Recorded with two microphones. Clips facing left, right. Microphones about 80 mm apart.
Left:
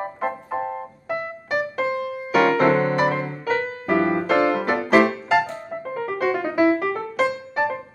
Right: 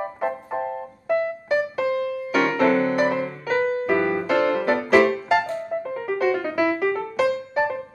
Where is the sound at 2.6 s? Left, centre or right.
Left.